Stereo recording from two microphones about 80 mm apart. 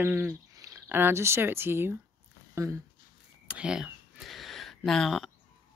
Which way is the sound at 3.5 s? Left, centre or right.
Centre.